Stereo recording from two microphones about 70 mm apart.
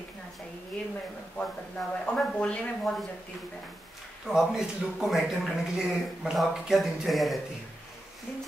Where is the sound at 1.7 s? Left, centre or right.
Centre.